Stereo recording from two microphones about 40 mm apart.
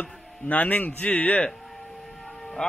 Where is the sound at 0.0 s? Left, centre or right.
Left.